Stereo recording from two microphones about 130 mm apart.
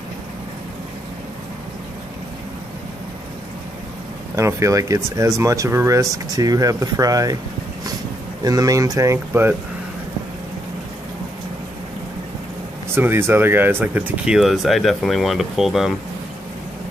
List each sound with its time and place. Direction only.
4.4 s speech: 20° right (ahead or behind)
8.5 s speech: 25° right (ahead or behind)
12.9 s speech: 20° right (ahead or behind); by 16.0 s centre (ahead or behind)